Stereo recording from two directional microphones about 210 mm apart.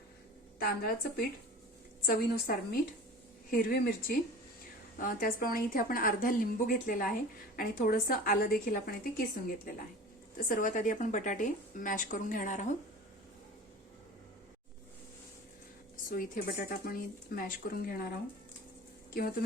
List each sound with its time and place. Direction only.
0.6 s a woman's voice: 45° left (ahead or behind)
10.3 s a woman's voice: 40° left (ahead or behind)
16.0 s speech: 40° left (ahead or behind)